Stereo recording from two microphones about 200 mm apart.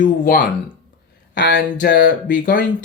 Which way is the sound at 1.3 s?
55° left (ahead or behind).